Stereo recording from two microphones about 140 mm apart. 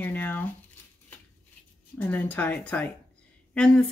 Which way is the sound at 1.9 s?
10° left (ahead or behind).